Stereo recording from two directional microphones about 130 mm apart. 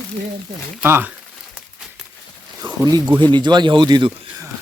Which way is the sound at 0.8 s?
20° right (ahead or behind).